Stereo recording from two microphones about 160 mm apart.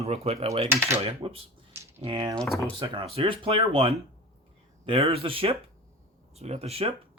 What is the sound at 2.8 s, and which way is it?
Speech, 35° right (ahead or behind).